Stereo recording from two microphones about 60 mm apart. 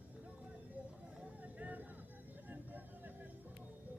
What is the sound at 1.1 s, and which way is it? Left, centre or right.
Vehicle, right.